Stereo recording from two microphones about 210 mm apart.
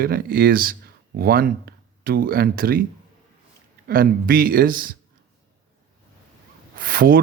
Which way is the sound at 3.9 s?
45° right (ahead or behind).